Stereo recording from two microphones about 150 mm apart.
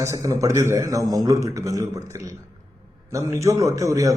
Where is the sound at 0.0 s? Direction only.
20° right (ahead or behind).